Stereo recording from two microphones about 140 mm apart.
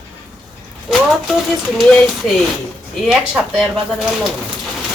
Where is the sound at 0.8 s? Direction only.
Centre (ahead or behind).